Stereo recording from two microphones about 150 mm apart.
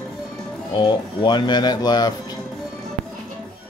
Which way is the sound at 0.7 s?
30° left (ahead or behind).